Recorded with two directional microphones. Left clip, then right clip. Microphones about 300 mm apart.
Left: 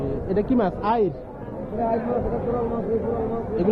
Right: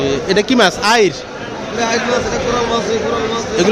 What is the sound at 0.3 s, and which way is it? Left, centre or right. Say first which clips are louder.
Speech: right 10 dB; right.